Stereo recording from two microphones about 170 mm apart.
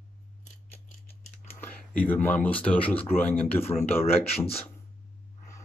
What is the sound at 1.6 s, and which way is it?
Speech, 10° left (ahead or behind).